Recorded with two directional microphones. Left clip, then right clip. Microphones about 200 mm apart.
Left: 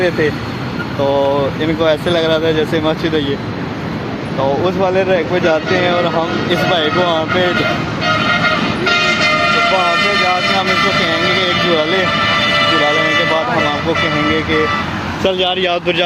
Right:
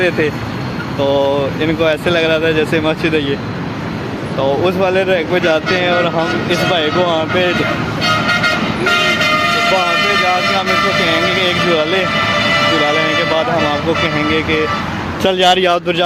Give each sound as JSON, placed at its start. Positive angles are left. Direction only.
{"t": 1.0, "sound": "speech", "side_deg": -10}
{"t": 4.4, "sound": "speech", "side_deg": -10}
{"t": 8.0, "sound": "vehicle", "side_deg": -25}
{"t": 9.0, "sound": "music", "side_deg": -45}
{"t": 9.9, "sound": "speech", "side_deg": -60}
{"t": 12.5, "sound": "speech", "side_deg": -45}
{"t": 15.2, "sound": "speech", "side_deg": -45}